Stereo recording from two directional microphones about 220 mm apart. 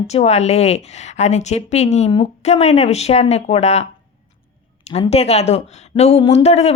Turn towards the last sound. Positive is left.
turn(degrees=30)  # may be behind; listen again after turning